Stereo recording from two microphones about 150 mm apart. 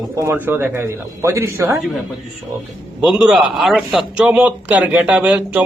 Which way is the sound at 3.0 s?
5° right (ahead or behind).